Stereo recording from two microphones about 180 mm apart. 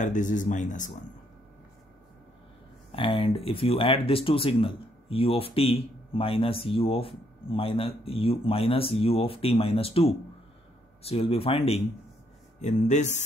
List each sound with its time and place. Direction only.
0.0 s speech: 45° left (ahead or behind)
2.9 s speech: 30° left (ahead or behind)